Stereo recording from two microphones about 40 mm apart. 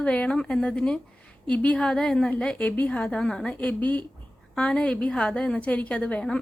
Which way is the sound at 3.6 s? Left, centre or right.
Left.